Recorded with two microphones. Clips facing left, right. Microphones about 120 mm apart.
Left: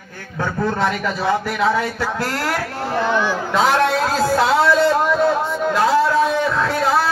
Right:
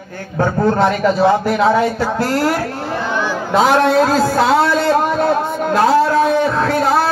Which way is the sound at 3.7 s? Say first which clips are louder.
Right 5 dB; 40° right (ahead or behind).